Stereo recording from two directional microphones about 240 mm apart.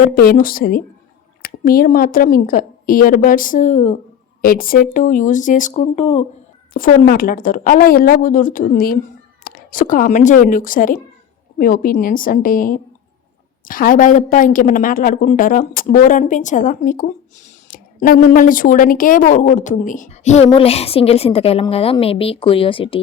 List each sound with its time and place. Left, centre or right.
0.0 s a woman's voice: left
6.7 s a woman's voice: left